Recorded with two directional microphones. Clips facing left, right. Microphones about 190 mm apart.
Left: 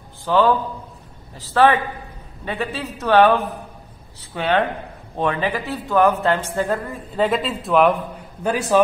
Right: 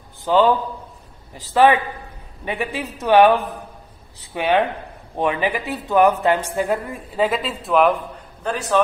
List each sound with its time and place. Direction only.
0.2 s a man's voice: 15° right (ahead or behind)
7.2 s speech: centre (ahead or behind)
8.5 s a man's voice: 10° left (ahead or behind)